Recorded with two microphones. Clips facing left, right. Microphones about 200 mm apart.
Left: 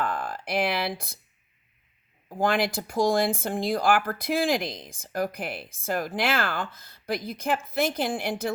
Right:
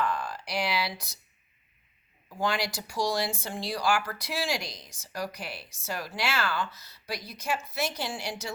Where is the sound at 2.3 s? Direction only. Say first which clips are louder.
Left 5 dB; 55° left (ahead or behind).